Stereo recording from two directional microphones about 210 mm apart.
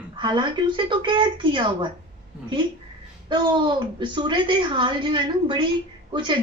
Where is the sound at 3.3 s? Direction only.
20° right (ahead or behind).